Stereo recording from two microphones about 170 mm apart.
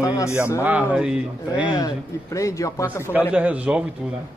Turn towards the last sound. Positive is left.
turn(degrees=-5)  # may be behind; listen again after turning